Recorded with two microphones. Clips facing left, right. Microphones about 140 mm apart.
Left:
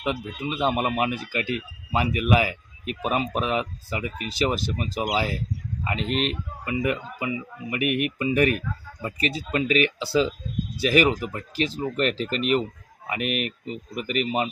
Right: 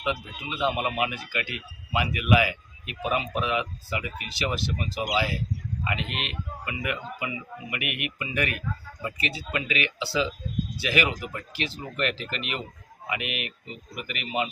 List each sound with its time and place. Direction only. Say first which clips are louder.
0.0 s speech: left 3 dB; 40° left (ahead or behind)